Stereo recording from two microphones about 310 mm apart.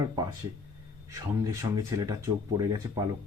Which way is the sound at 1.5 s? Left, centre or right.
Centre.